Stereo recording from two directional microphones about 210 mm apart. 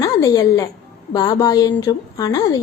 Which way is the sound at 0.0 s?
15° left (ahead or behind).